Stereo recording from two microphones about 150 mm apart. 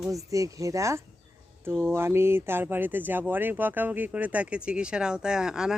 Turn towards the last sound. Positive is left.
turn(degrees=-5)  # may be behind; listen again after turning